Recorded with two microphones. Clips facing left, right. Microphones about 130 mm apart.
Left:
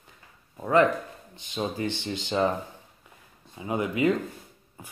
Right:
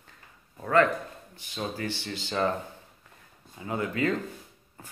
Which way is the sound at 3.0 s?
15° left (ahead or behind).